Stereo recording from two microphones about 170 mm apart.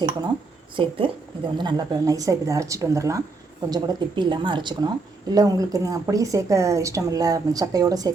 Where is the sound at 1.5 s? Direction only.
25° right (ahead or behind).